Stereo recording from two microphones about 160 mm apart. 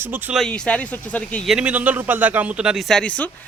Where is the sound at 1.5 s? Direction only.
10° right (ahead or behind); by 3.3 s 10° left (ahead or behind).